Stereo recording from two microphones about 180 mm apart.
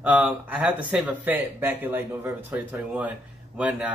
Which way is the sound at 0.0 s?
5° right (ahead or behind).